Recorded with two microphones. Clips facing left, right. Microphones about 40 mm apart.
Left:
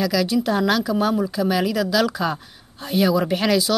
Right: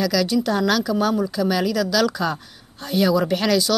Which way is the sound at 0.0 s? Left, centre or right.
Centre.